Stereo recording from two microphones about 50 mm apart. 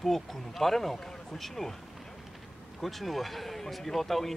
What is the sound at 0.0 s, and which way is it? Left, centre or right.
Speech, centre.